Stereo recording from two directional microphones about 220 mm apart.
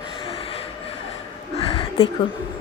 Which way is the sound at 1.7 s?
25° left (ahead or behind).